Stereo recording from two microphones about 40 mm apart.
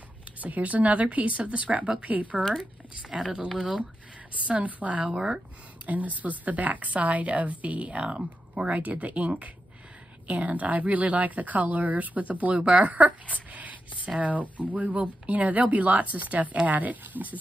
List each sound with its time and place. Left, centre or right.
0.4 s speech: right
3.0 s speech: centre
4.5 s speech: right
5.0 s speech: centre
5.9 s speech: right